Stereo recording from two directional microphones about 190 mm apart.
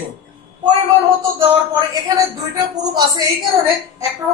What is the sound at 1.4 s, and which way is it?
A woman's voice, 20° right (ahead or behind).